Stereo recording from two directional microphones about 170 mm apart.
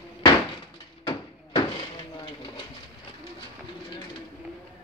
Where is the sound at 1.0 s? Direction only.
25° left (ahead or behind).